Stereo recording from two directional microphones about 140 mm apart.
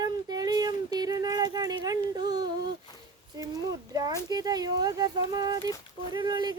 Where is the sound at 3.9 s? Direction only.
25° right (ahead or behind).